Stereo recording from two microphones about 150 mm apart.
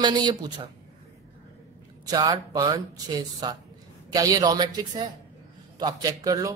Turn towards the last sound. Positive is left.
turn(degrees=-25)  # may be behind; listen again after turning